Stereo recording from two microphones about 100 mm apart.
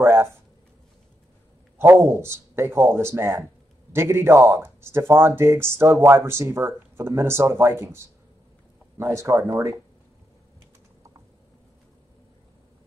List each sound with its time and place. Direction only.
0.0 s speech: 25° right (ahead or behind)
1.8 s speech: 25° right (ahead or behind)